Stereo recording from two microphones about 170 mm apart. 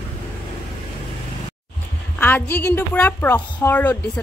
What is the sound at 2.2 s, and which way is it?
Speech, 10° left (ahead or behind).